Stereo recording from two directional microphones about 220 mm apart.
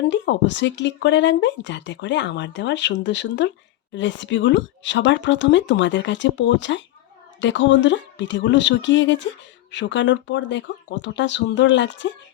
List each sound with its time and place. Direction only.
0.1 s speech: 55° left (ahead or behind)